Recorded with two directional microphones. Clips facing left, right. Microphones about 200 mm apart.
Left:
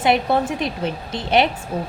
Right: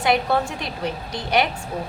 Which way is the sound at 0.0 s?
20° left (ahead or behind).